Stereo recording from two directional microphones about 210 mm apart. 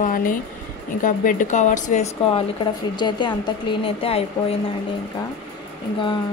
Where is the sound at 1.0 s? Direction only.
40° left (ahead or behind).